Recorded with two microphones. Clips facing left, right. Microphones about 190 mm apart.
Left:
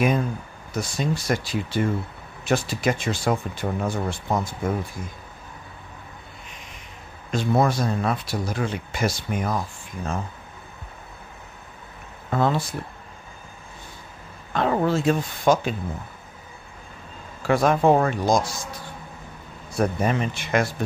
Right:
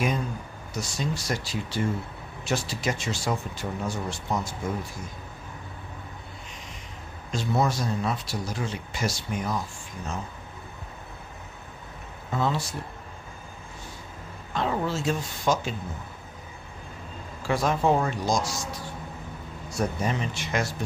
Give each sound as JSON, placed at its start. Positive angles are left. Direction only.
{"t": 0.7, "sound": "speech", "side_deg": 55}
{"t": 7.2, "sound": "speech", "side_deg": 55}
{"t": 12.3, "sound": "speech", "side_deg": 55}
{"t": 14.5, "sound": "speech", "side_deg": 60}
{"t": 17.5, "sound": "speech", "side_deg": 60}
{"t": 19.8, "sound": "speech", "side_deg": 55}